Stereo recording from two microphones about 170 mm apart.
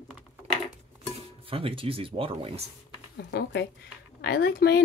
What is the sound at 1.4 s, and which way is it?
Speech, 35° right (ahead or behind).